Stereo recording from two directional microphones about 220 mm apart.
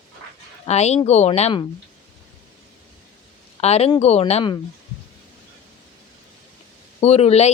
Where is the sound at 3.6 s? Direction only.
30° left (ahead or behind).